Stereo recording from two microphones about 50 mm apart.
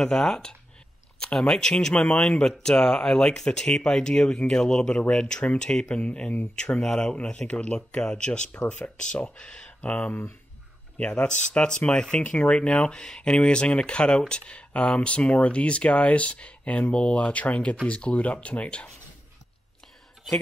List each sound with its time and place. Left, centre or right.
0.0 s speech: centre
1.2 s a sound: centre
1.5 s speech: centre
5.9 s speech: left
6.5 s speech: centre
9.4 s speech: centre
11.0 s speech: left